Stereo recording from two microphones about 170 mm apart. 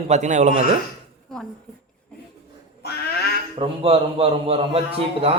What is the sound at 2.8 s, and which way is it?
Quack, 70° left (ahead or behind).